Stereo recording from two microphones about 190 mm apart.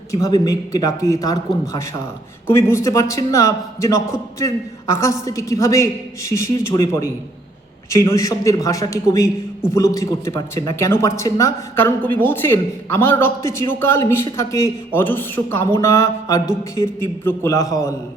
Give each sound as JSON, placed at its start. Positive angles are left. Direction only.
{"t": 0.1, "sound": "a man's voice", "side_deg": 20}